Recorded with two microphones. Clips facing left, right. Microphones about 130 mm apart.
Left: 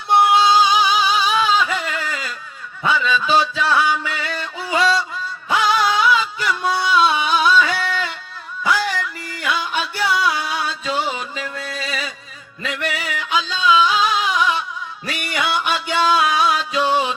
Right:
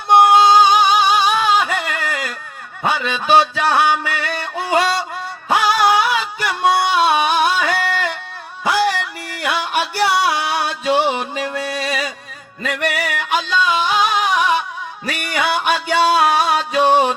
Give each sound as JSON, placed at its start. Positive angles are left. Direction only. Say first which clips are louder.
{"t": 0.1, "sound": "music", "louder": "right 4 dB", "side_deg": -60}
{"t": 5.5, "sound": "music", "louder": "right 2 dB", "side_deg": -40}
{"t": 5.8, "sound": "music", "louder": "right 2 dB", "side_deg": -60}
{"t": 12.6, "sound": "music", "louder": "right 4 dB", "side_deg": -55}